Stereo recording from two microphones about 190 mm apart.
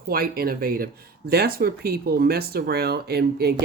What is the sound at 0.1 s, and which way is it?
Speech, 50° right (ahead or behind).